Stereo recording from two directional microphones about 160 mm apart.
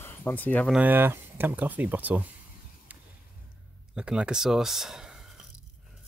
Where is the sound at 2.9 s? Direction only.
10° right (ahead or behind).